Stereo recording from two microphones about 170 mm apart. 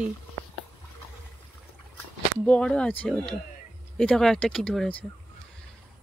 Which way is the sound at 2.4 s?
5° left (ahead or behind).